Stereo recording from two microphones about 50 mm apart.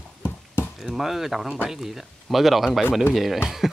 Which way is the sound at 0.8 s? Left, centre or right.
Centre.